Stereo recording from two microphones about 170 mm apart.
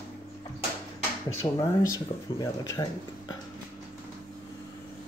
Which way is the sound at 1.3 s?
15° left (ahead or behind).